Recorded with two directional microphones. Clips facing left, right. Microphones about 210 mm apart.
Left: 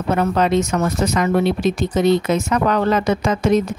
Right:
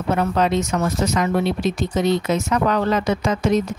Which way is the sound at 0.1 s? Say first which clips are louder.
Left 2 dB; 50° left (ahead or behind).